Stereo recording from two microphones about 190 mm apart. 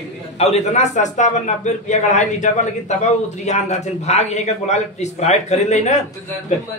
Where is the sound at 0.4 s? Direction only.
35° left (ahead or behind).